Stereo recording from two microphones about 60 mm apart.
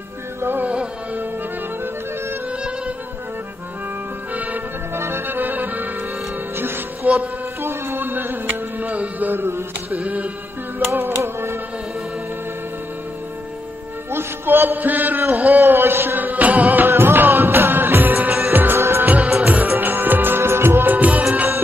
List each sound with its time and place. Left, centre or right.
0.4 s music: right
0.7 s music: right
4.3 s music: right
4.9 s accordion: right
6.5 s music: right
7.6 s a sound: right
9.3 s music: right
9.9 s music: right
10.9 s music: right
14.1 s a man's voice: right
15.6 s music: right
18.8 s music of bollywood: right
19.0 s music of bollywood: right
19.4 s music: right